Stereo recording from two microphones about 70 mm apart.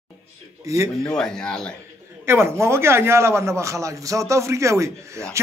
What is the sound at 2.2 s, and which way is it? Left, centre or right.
A man's voice, right.